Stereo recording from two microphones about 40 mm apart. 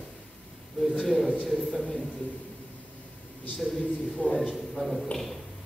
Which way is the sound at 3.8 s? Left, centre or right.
Left.